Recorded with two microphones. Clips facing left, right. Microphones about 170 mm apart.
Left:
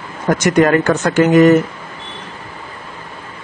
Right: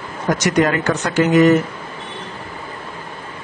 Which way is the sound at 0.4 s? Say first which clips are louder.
Left 5 dB; 50° left (ahead or behind).